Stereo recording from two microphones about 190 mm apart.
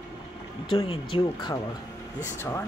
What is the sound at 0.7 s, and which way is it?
Speech, 25° left (ahead or behind).